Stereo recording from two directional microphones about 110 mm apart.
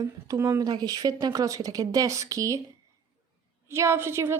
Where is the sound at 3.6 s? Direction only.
25° right (ahead or behind).